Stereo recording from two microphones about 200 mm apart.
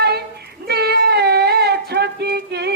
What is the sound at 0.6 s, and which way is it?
Child singing, 55° right (ahead or behind).